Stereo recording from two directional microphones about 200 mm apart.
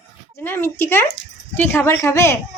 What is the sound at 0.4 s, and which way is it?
Speech, 10° left (ahead or behind).